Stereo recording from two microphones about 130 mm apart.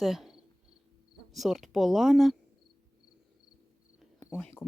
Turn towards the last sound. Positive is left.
turn(degrees=15)  # may be behind; listen again after turning